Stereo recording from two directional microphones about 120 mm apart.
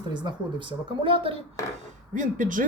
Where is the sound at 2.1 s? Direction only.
90° right.